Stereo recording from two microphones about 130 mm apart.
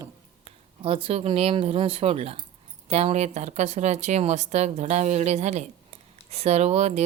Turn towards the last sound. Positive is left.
turn(degrees=-55)  # may be behind; listen again after turning